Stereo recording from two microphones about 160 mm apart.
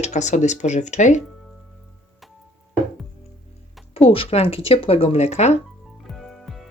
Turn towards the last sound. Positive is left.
turn(degrees=0)  # may be behind; listen again after turning